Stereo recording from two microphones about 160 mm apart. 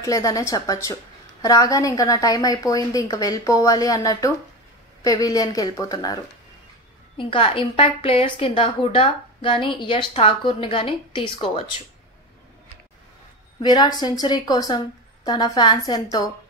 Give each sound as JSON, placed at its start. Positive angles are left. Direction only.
{"t": 0.0, "sound": "a woman's voice", "side_deg": 20}
{"t": 7.2, "sound": "a woman's voice", "side_deg": 30}
{"t": 13.6, "sound": "a woman's voice", "side_deg": 25}